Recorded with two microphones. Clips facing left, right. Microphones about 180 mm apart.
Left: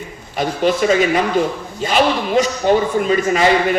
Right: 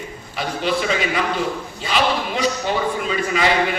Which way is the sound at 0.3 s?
45° left (ahead or behind).